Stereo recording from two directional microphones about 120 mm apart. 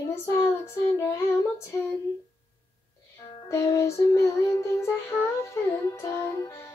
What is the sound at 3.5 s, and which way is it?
Music, 25° left (ahead or behind).